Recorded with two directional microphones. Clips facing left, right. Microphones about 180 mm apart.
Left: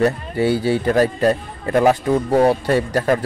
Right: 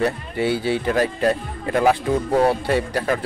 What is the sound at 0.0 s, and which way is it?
Speech, 40° left (ahead or behind).